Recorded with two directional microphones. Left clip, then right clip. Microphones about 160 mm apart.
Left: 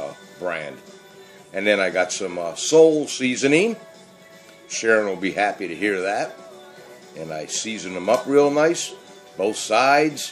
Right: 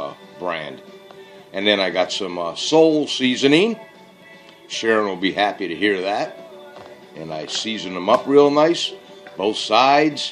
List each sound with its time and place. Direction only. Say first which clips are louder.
0.0 s music: right 2 dB; 15° left (ahead or behind)
1.5 s speech: right 1 dB; 15° left (ahead or behind)